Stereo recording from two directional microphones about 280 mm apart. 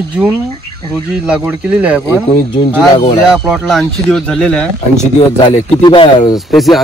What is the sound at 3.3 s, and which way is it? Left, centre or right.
Speech, centre.